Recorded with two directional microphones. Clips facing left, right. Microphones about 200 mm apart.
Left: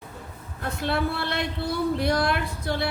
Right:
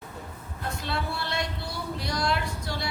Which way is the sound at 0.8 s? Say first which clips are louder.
Left 7 dB; 55° left (ahead or behind).